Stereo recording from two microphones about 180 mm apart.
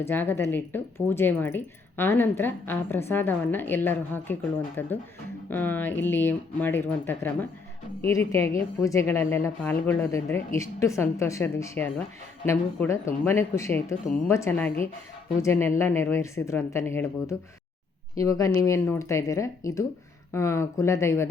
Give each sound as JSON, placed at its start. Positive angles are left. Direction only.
{"t": 0.0, "sound": "a woman's voice", "side_deg": 10}